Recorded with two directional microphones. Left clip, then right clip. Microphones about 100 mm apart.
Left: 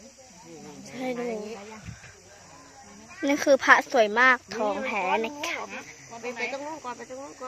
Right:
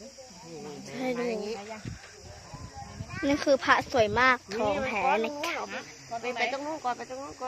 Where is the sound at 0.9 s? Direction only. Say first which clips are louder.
Even; 5° left (ahead or behind).